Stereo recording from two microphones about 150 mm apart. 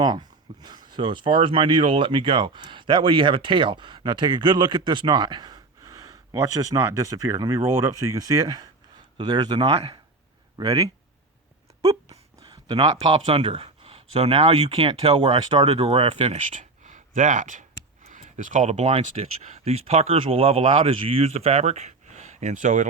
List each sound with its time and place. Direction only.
0.0 s speech: 30° right (ahead or behind)
9.6 s speech: 40° right (ahead or behind)
10.6 s speech: 25° right (ahead or behind)
12.6 s speech: 30° right (ahead or behind); by 22.9 s 55° right (ahead or behind)